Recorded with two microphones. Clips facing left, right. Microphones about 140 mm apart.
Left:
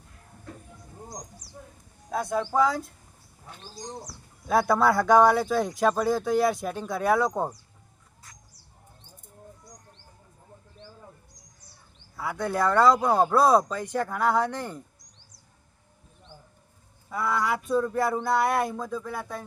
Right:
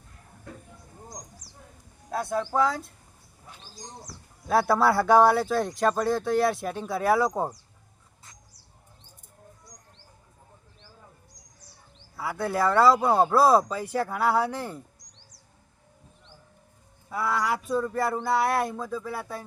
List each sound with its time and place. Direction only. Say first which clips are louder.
2.0 s speech: left 1 dB; centre (ahead or behind)
4.4 s speech: even; centre (ahead or behind)
12.1 s speech: even; centre (ahead or behind)
14.9 s a sound: right 2 dB; 90° right
17.1 s speech: even; centre (ahead or behind)